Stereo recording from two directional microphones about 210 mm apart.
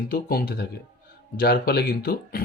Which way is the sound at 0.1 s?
45° left (ahead or behind).